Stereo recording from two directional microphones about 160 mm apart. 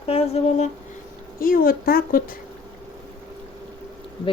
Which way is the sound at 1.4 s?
60° left (ahead or behind).